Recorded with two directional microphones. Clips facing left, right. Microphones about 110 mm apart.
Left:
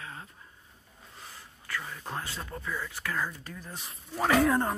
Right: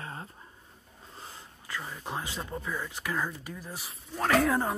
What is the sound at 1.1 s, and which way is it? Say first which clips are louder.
Dog: right 2 dB; 35° right (ahead or behind).